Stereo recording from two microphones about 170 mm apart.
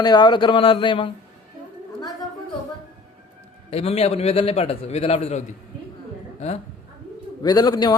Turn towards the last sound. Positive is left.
turn(degrees=25)  # may be behind; listen again after turning